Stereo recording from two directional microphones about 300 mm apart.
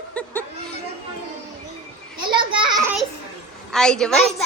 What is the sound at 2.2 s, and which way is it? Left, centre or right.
Speech, centre.